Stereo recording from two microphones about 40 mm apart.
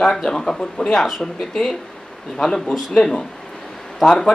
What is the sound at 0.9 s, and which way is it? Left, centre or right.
Speech, centre.